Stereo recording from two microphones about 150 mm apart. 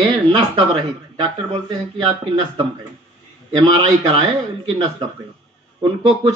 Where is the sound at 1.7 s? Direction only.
30° right (ahead or behind).